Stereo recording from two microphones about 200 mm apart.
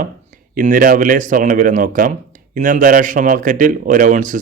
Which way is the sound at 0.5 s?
40° right (ahead or behind).